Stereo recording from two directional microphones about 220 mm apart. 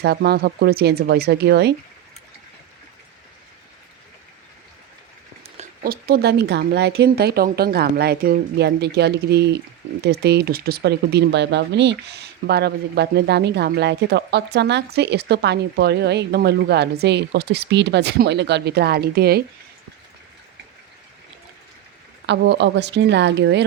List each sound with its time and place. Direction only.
0.0 s speech: 45° right (ahead or behind)
5.5 s speech: 40° right (ahead or behind)
22.3 s speech: 50° right (ahead or behind)